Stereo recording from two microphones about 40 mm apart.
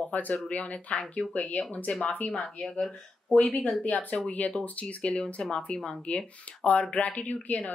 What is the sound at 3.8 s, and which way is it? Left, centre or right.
Speech, left.